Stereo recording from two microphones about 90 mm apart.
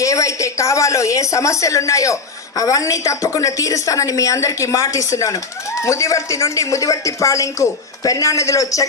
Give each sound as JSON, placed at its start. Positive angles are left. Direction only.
{"t": 0.0, "sound": "speech", "side_deg": 35}